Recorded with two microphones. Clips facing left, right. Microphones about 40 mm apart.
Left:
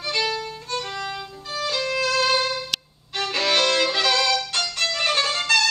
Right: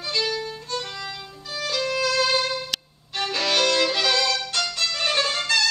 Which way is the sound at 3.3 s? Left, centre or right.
Centre.